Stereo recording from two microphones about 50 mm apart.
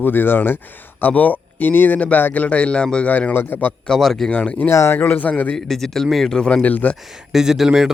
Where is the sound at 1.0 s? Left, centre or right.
Left.